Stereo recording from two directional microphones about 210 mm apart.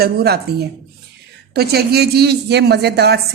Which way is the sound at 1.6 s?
50° right (ahead or behind).